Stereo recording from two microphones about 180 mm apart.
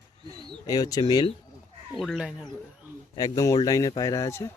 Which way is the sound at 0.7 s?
20° left (ahead or behind).